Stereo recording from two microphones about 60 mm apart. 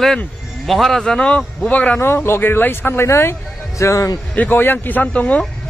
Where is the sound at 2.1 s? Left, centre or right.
Left.